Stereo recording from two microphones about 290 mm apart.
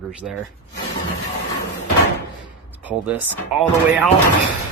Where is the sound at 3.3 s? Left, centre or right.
Centre.